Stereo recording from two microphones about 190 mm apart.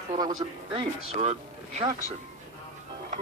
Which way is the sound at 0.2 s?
20° right (ahead or behind).